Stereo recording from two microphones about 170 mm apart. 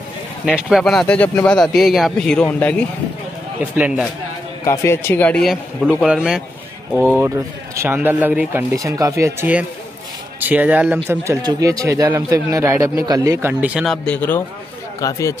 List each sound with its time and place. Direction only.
0.5 s speech: centre (ahead or behind)
3.7 s speech: 5° right (ahead or behind)
4.6 s speech: 15° left (ahead or behind); by 6.4 s 5° right (ahead or behind)
6.9 s a man's voice: 5° left (ahead or behind)
7.2 s a man's voice: 15° right (ahead or behind)
14.0 s a man's voice: 10° left (ahead or behind)